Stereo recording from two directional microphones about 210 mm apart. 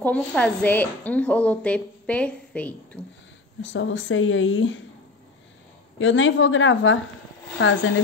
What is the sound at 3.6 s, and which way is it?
A woman's voice, 65° left (ahead or behind).